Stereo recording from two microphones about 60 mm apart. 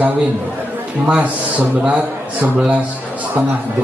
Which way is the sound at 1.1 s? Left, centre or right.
Right.